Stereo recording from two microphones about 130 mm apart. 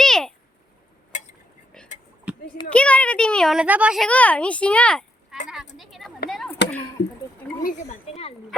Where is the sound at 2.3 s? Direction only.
10° right (ahead or behind).